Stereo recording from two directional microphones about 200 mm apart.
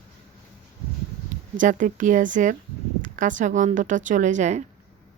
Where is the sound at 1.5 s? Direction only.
40° right (ahead or behind).